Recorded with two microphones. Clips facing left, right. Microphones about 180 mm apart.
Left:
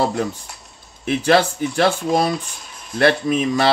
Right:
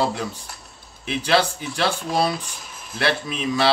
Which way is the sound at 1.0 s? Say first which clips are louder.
Left 4 dB; 50° left (ahead or behind).